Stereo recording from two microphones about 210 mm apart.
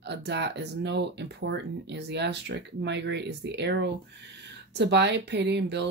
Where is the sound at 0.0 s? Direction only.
55° right (ahead or behind).